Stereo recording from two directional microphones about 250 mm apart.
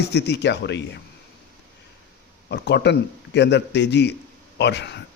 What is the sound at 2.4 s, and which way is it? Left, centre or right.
A man's voice, left.